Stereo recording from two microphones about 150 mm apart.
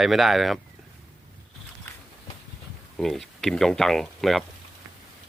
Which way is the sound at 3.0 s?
Centre (ahead or behind).